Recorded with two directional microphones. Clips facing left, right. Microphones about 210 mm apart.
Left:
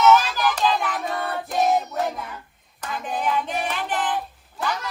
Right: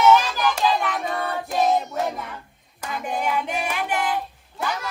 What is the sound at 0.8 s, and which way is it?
Child singing, centre (ahead or behind).